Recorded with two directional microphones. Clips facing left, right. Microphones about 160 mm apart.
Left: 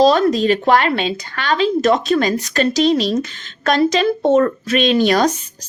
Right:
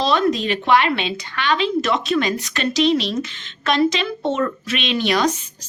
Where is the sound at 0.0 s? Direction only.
40° left (ahead or behind).